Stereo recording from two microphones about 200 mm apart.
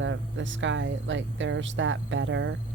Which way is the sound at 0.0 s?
70° right (ahead or behind).